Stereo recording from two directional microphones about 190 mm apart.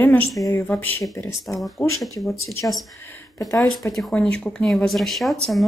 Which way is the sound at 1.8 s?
15° left (ahead or behind).